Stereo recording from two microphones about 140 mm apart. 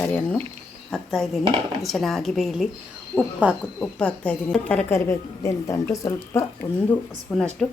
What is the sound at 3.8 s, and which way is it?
A woman's voice, 10° left (ahead or behind).